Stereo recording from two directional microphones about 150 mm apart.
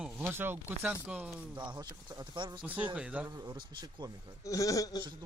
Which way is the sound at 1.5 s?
25° right (ahead or behind).